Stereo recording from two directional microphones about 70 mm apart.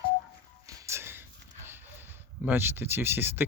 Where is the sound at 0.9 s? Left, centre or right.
Right.